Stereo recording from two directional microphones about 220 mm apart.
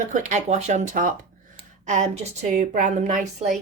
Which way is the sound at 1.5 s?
30° right (ahead or behind).